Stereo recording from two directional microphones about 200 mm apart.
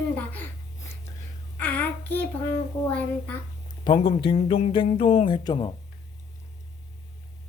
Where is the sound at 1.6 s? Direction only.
10° left (ahead or behind).